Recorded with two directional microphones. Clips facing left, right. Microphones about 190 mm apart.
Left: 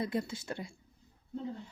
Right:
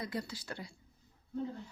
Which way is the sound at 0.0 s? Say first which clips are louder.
Left 5 dB; 25° left (ahead or behind).